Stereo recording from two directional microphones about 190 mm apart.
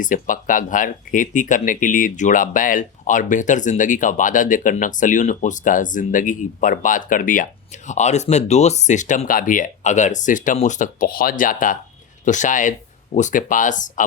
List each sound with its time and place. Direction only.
0.0 s speech: 45° left (ahead or behind)